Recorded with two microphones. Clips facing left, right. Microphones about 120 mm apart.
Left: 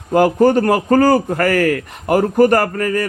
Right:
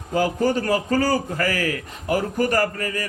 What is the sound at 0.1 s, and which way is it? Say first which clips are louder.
A man's voice: left 9 dB; 55° left (ahead or behind).